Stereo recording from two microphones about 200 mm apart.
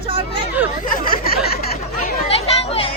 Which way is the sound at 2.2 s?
30° left (ahead or behind).